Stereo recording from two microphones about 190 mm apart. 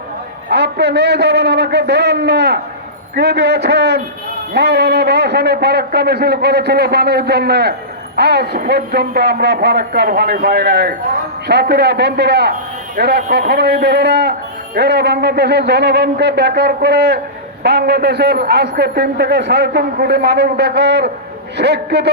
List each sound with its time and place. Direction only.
0.5 s a man's voice: 60° right (ahead or behind)